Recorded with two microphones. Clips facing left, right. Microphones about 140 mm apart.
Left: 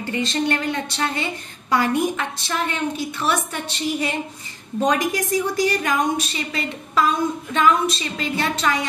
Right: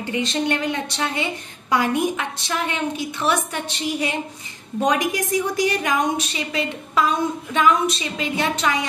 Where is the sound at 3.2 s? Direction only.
15° right (ahead or behind).